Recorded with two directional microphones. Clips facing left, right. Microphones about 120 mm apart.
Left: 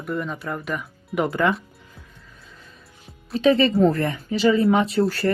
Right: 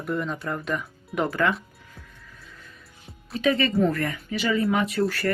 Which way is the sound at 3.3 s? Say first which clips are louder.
Left 5 dB; 30° left (ahead or behind).